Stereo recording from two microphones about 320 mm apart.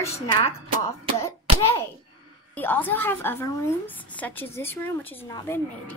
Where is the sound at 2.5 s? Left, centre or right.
Centre.